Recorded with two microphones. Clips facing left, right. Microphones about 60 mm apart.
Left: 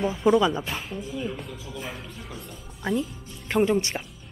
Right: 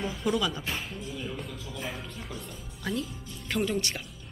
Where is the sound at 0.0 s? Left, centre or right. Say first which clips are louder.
Left 8 dB; left.